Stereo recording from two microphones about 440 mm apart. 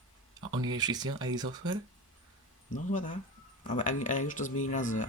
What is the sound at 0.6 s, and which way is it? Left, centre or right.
Speech, centre.